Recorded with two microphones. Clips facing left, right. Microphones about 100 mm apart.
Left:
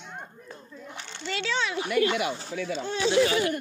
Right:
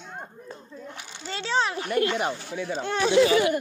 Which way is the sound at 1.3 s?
30° right (ahead or behind).